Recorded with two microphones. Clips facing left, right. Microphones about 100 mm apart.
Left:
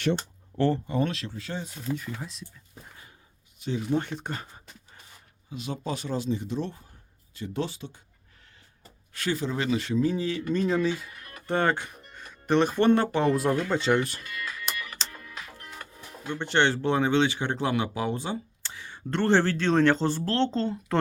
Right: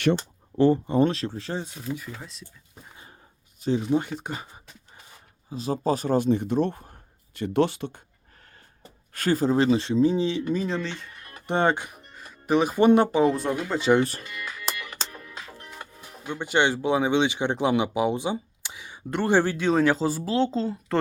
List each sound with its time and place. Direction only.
0.5 s speech: 15° right (ahead or behind)
0.9 s speech: 30° right (ahead or behind)
2.0 s speech: centre (ahead or behind)
3.6 s speech: 35° right (ahead or behind)
3.8 s speech: 10° right (ahead or behind)
5.5 s a man's voice: 35° right (ahead or behind); by 8.0 s 60° right (ahead or behind)
9.1 s speech: 45° right (ahead or behind); by 10.5 s 20° right (ahead or behind)
10.5 s speech: centre (ahead or behind)
10.8 s speech: 10° left (ahead or behind)
11.4 s speech: 20° right (ahead or behind)
12.1 s music: 5° right (ahead or behind)
13.7 s speech: 5° right (ahead or behind)
14.2 s music: 25° right (ahead or behind)
15.1 s speech: 25° right (ahead or behind); by 21.0 s 5° right (ahead or behind)